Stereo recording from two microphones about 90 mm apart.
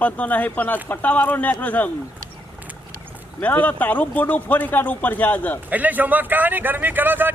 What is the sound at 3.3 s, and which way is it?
Speech, 15° left (ahead or behind).